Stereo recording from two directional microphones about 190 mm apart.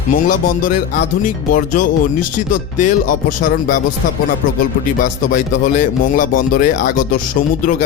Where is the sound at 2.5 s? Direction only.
45° left (ahead or behind).